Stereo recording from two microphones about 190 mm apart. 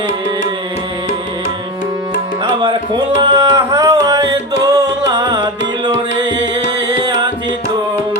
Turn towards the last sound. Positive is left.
turn(degrees=-25)  # may be behind; listen again after turning